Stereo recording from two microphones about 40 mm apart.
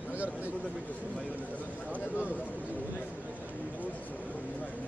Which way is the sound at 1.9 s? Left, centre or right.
Right.